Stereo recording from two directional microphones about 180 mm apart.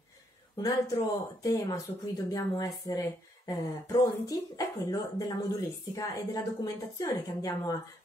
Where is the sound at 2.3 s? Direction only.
20° left (ahead or behind).